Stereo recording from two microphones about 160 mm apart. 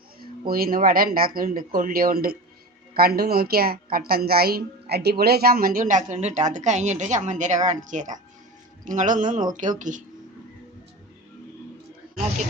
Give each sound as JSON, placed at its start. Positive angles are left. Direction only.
{"t": 0.2, "sound": "a woman's voice", "side_deg": -70}